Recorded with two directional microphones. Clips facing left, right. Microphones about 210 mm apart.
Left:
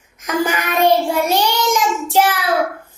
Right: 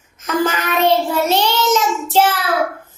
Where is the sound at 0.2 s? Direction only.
15° left (ahead or behind).